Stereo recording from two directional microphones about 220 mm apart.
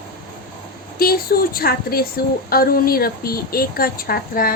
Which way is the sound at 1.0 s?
45° left (ahead or behind).